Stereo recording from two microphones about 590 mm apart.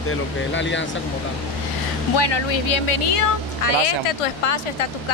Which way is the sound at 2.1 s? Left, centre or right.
Left.